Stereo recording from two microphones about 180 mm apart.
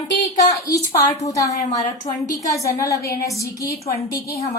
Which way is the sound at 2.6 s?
20° left (ahead or behind).